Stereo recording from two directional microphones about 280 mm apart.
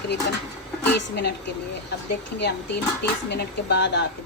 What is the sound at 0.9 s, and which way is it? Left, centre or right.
Speech, left.